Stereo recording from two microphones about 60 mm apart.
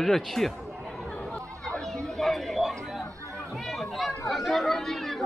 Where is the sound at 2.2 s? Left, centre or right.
Centre.